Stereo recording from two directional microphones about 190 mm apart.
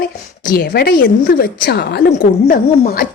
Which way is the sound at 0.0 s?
55° left (ahead or behind).